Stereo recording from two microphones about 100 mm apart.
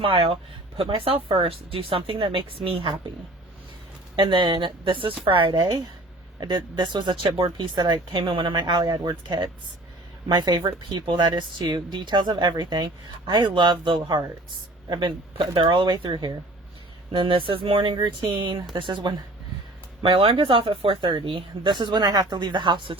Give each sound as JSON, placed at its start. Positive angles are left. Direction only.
{"t": 0.0, "sound": "speech", "side_deg": -60}
{"t": 4.1, "sound": "speech", "side_deg": -50}
{"t": 17.1, "sound": "speech", "side_deg": -60}
{"t": 20.0, "sound": "speech", "side_deg": -65}